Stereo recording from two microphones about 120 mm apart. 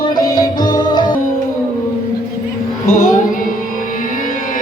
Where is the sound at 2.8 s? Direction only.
90° left.